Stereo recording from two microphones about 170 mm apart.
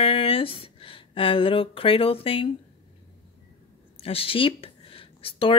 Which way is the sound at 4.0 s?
35° left (ahead or behind).